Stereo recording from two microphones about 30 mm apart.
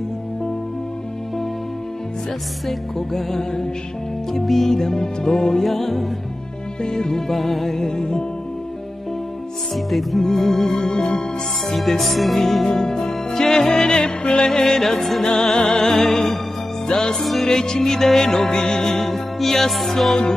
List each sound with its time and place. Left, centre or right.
3.1 s music: centre
5.6 s music: centre
6.8 s music: left
7.3 s music: centre; by 8.3 s left
9.8 s music: centre
10.3 s music: centre
11.7 s music: centre
12.6 s music: left
14.6 s music: centre
15.2 s music: left
16.8 s music: left
17.2 s music: centre
17.5 s music: left
18.9 s music: centre